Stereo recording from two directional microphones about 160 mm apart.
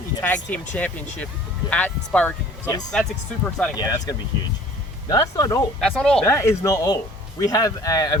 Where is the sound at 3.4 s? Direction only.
5° left (ahead or behind).